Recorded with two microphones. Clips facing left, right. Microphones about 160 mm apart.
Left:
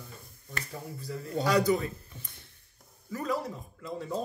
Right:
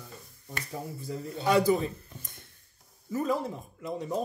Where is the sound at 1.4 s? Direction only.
25° right (ahead or behind).